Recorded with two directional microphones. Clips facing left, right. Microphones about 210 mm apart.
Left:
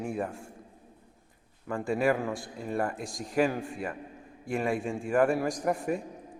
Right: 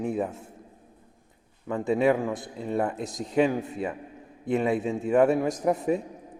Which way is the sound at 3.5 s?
20° right (ahead or behind).